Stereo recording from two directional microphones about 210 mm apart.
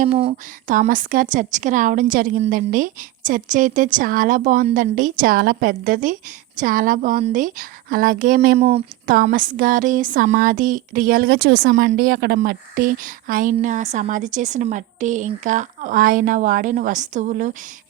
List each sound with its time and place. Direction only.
0.0 s speech: 30° right (ahead or behind)
8.5 s speech: 30° right (ahead or behind)